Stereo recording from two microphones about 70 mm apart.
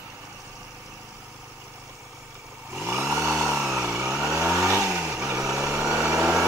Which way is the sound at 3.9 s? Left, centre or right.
Right.